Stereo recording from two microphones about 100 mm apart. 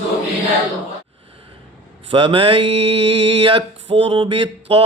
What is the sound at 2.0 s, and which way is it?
Mantra, 65° right (ahead or behind).